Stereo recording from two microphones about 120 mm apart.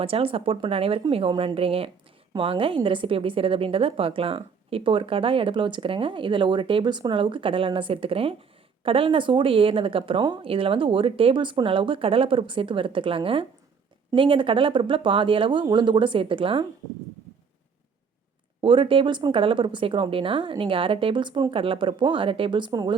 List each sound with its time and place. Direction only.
0.0 s a woman's voice: 50° right (ahead or behind)
18.6 s a woman's voice: 45° right (ahead or behind)